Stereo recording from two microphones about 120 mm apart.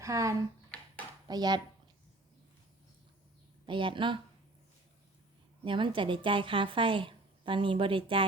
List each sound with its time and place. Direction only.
0.0 s speech: 25° right (ahead or behind)
3.7 s a woman's voice: 45° right (ahead or behind)
5.6 s a woman's voice: 45° right (ahead or behind)